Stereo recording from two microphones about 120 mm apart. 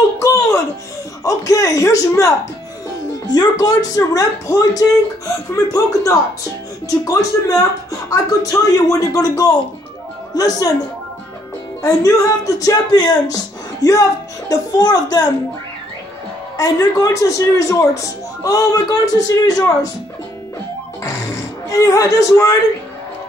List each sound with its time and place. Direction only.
0.2 s music: 25° left (ahead or behind)
1.2 s speech: 30° left (ahead or behind)
11.8 s speech: 30° left (ahead or behind)
14.5 s speech: 35° left (ahead or behind)
16.5 s speech: 30° left (ahead or behind)
21.6 s speech: 25° left (ahead or behind)